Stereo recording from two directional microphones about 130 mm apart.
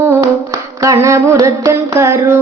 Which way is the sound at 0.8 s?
25° right (ahead or behind).